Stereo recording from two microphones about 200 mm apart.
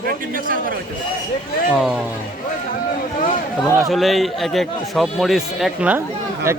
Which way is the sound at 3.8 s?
Centre (ahead or behind).